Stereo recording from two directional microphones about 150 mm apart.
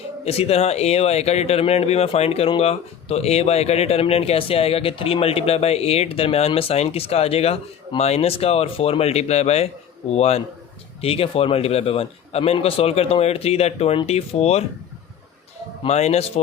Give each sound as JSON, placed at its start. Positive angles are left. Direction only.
{"t": 0.3, "sound": "a man's voice", "side_deg": 45}
{"t": 15.8, "sound": "speech", "side_deg": 45}